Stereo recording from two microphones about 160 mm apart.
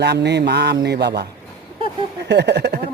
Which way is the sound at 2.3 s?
90° right.